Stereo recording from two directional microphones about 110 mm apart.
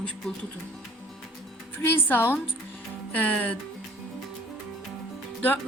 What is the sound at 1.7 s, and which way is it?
A woman's voice, 20° left (ahead or behind).